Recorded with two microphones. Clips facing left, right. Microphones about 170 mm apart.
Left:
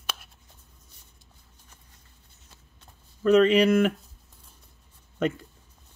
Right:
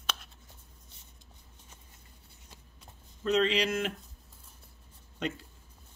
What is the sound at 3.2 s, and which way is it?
Speech, 55° left (ahead or behind).